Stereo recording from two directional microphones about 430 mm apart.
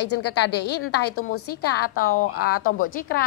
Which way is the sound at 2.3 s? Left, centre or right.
Left.